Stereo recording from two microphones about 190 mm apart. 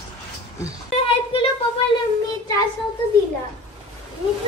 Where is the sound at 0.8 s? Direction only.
30° left (ahead or behind).